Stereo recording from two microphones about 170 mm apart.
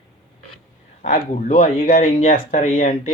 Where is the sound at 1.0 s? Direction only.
50° left (ahead or behind).